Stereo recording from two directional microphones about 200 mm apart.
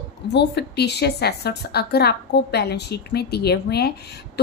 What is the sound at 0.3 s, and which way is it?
A woman's voice, 60° left (ahead or behind).